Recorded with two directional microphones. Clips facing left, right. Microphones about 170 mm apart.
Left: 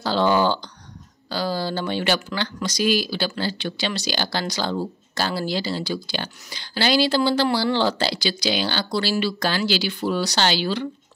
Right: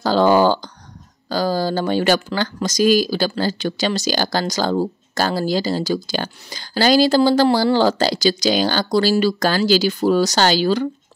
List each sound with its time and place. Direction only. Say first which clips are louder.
0.0 s speech: right 5 dB; 45° right (ahead or behind)